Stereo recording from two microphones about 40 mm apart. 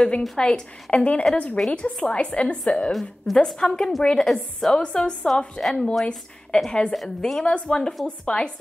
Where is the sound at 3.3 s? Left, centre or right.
Centre.